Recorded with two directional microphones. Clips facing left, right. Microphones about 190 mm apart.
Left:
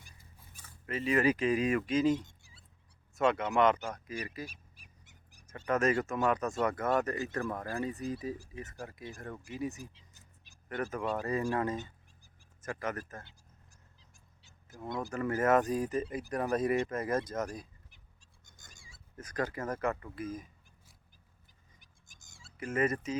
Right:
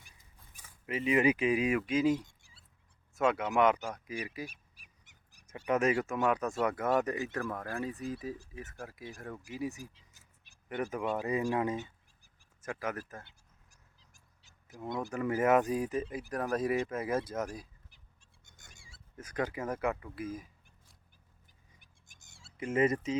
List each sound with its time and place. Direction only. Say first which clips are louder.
0.5 s speech: right 1 dB; 10° right (ahead or behind)
5.3 s speech: right 1 dB; 15° right (ahead or behind)
7.3 s speech: left 1 dB; 5° right (ahead or behind)
14.8 s speech: right 1 dB; 15° right (ahead or behind)
18.5 s dog: even; 30° right (ahead or behind)
19.1 s speech: even; 10° right (ahead or behind)
22.3 s cat: right 2 dB; 25° right (ahead or behind)